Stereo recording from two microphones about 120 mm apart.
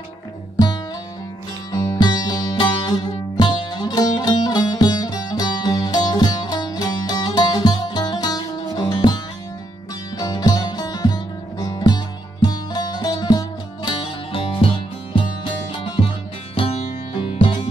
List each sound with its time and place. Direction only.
1.7 s music: 30° left (ahead or behind); by 14.7 s 50° left (ahead or behind)
16.5 s music: 45° left (ahead or behind)